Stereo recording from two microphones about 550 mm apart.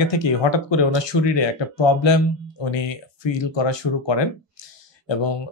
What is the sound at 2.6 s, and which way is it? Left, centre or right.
Speech, left.